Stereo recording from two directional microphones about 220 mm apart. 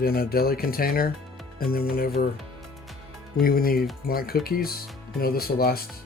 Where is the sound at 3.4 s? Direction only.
40° left (ahead or behind).